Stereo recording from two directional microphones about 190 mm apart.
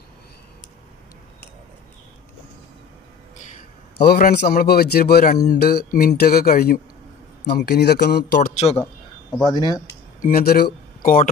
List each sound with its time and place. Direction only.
4.2 s speech: 55° left (ahead or behind)
9.3 s speech: 20° left (ahead or behind)
10.2 s speech: 50° left (ahead or behind)